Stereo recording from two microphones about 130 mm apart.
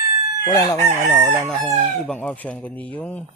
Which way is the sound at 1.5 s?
Centre (ahead or behind).